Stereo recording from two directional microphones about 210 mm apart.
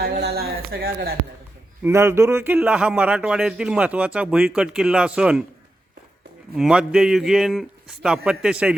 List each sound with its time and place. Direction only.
0.0 s speech: 50° right (ahead or behind)
1.8 s a man's voice: 15° right (ahead or behind)
6.6 s a man's voice: 5° right (ahead or behind)